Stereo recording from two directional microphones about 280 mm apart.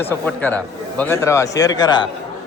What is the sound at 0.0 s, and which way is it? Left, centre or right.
Speech, centre.